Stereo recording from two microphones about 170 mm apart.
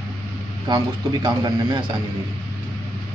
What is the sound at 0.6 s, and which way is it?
A man's voice, 25° right (ahead or behind).